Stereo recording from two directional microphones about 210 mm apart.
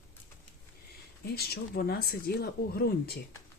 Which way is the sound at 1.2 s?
50° left (ahead or behind).